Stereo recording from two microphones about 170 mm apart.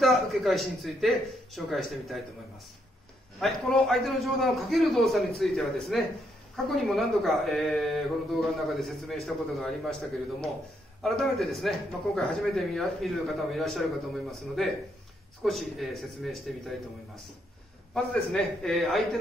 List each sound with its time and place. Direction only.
0.0 s speech: centre (ahead or behind)
3.3 s speech: centre (ahead or behind)
11.0 s speech: centre (ahead or behind)
17.9 s speech: 5° left (ahead or behind)